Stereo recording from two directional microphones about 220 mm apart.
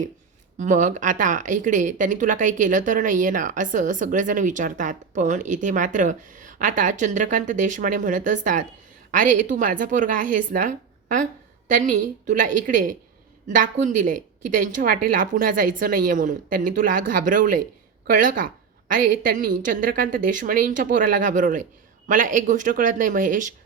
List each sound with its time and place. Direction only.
0.6 s speech: 35° right (ahead or behind)